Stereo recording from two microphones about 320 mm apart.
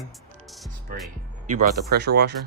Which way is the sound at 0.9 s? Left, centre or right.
Right.